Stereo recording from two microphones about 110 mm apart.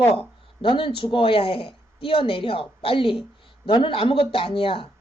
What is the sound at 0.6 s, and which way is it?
A woman's voice, 55° left (ahead or behind).